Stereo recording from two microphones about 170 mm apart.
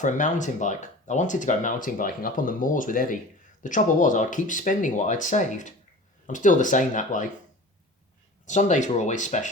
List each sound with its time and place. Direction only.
0.0 s speech: 45° left (ahead or behind)
8.4 s speech: 45° left (ahead or behind)